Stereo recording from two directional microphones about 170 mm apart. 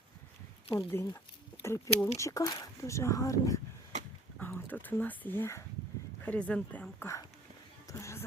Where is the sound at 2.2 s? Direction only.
20° left (ahead or behind).